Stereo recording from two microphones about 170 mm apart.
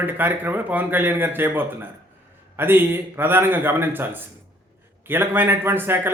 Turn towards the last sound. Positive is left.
turn(degrees=-10)  # may be behind; listen again after turning